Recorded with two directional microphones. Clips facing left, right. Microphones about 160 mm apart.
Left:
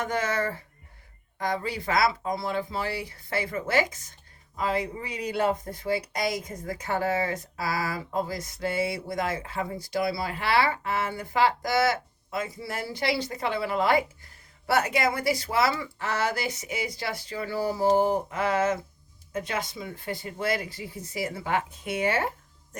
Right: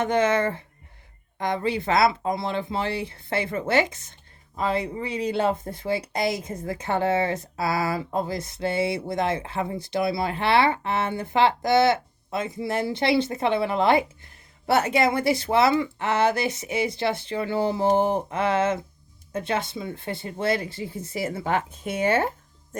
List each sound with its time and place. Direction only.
0.0 s speech: 20° right (ahead or behind)